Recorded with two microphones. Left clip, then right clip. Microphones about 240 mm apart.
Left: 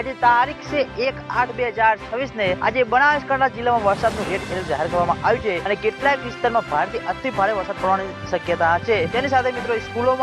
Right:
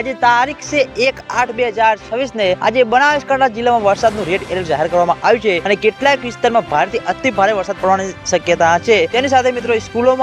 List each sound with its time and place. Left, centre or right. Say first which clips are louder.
0.0 s speech: right 4 dB; right